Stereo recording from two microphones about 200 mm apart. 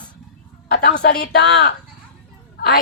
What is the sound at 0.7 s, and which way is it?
A woman's voice, 55° left (ahead or behind).